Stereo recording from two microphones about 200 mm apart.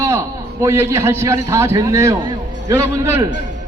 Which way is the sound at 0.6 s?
15° right (ahead or behind).